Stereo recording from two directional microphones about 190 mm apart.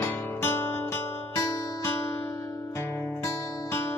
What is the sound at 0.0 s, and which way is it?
Music, 10° left (ahead or behind).